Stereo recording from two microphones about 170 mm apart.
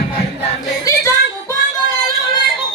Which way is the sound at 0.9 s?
20° left (ahead or behind).